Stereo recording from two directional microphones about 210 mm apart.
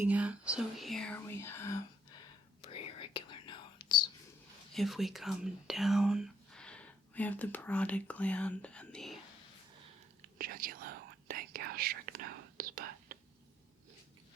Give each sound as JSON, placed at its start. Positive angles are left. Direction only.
{"t": 0.0, "sound": "speech", "side_deg": -5}
{"t": 2.6, "sound": "whispering", "side_deg": 25}
{"t": 4.7, "sound": "speech", "side_deg": 0}
{"t": 10.2, "sound": "whispering", "side_deg": -45}